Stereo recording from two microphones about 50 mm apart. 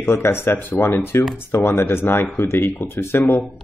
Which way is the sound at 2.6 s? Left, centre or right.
Left.